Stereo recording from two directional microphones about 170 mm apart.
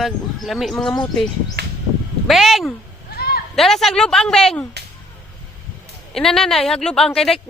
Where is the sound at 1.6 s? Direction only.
70° right (ahead or behind).